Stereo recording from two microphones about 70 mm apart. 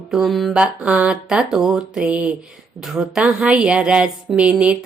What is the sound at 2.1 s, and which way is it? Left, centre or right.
Speech, centre.